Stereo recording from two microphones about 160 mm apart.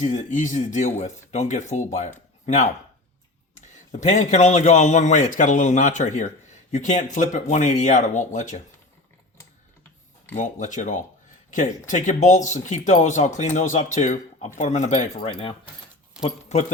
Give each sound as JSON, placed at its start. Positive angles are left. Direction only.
{"t": 0.0, "sound": "speech", "side_deg": 50}
{"t": 4.0, "sound": "speech", "side_deg": 45}
{"t": 10.3, "sound": "speech", "side_deg": 50}
{"t": 16.2, "sound": "speech", "side_deg": 45}